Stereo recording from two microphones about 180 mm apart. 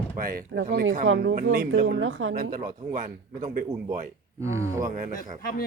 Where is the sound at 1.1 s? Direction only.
90° right.